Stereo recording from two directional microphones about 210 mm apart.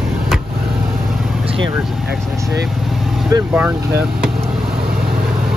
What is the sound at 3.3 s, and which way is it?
Speech, 10° right (ahead or behind).